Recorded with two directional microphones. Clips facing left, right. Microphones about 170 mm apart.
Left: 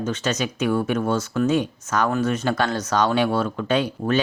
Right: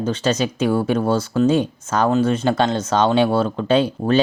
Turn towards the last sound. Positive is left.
turn(degrees=-30)  # may be behind; listen again after turning